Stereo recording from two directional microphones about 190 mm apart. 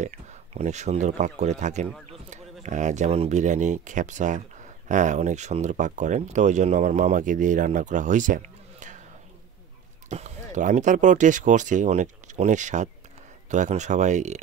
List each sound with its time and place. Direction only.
0.0 s speech: 40° right (ahead or behind)
10.0 s speech: 40° right (ahead or behind)